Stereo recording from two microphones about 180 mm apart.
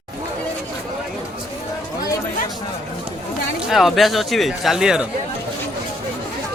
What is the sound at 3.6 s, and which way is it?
Speech, centre (ahead or behind).